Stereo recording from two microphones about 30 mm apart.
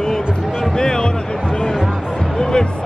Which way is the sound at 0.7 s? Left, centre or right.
Left.